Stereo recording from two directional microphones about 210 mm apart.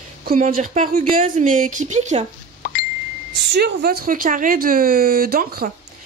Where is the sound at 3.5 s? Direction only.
50° right (ahead or behind).